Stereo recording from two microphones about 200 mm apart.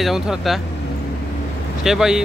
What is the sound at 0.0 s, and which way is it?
Speech, centre (ahead or behind).